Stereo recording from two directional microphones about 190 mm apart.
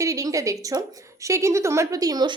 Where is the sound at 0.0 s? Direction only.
20° right (ahead or behind).